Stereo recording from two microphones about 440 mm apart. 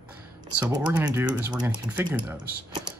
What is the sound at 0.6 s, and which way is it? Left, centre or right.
Speech, centre.